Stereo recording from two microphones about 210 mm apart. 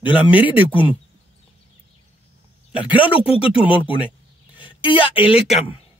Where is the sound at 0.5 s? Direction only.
25° left (ahead or behind).